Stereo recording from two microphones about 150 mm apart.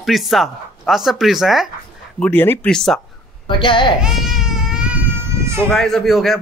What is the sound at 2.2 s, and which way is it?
Speech, 15° left (ahead or behind).